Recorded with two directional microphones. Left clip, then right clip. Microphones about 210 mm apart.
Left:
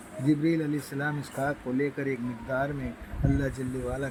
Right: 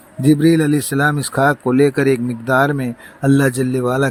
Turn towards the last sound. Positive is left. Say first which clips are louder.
# right 16 dB
turn(degrees=-45)  # may be behind; listen again after turning